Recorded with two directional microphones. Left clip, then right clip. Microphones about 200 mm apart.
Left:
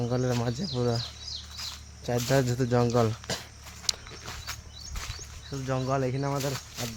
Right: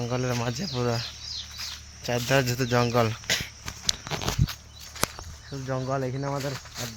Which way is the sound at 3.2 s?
25° left (ahead or behind).